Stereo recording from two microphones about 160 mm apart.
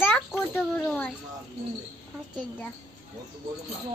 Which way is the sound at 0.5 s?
10° left (ahead or behind).